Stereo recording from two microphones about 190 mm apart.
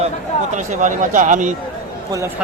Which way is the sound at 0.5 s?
40° right (ahead or behind).